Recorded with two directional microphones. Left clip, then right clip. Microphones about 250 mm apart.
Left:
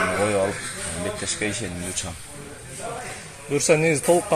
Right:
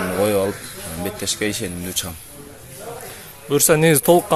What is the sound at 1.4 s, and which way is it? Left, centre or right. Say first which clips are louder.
Speech: right 4 dB; right.